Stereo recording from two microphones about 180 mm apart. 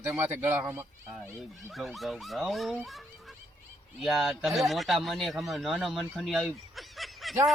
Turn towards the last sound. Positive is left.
turn(degrees=0)  # may be behind; listen again after turning